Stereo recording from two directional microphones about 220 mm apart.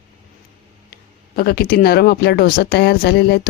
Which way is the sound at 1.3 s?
45° left (ahead or behind).